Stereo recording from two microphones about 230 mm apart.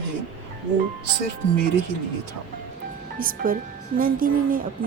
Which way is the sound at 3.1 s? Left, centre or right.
Right.